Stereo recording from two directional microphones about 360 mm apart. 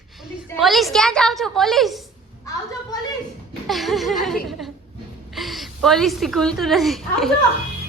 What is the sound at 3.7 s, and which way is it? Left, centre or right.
A woman's voice, centre.